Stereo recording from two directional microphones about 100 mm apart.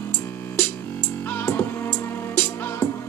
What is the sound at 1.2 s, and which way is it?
Music, 20° left (ahead or behind).